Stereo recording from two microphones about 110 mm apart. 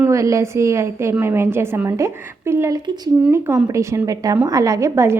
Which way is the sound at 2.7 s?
40° right (ahead or behind).